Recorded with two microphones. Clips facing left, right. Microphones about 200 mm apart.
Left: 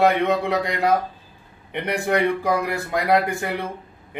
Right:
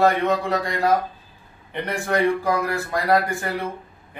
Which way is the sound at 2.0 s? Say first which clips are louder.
Right 1 dB; 20° left (ahead or behind).